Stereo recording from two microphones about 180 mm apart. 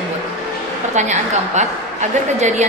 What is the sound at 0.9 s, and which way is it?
Speech, 40° right (ahead or behind).